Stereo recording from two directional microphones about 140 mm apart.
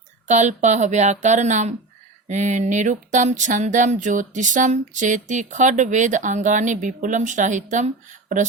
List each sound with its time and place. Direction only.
0.3 s speech: 60° right (ahead or behind)